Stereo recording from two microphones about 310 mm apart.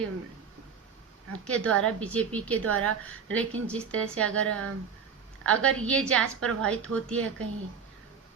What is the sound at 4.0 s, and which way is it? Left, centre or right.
Speech, right.